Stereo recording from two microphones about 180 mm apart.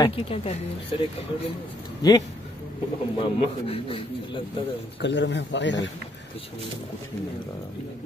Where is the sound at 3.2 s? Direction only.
30° left (ahead or behind).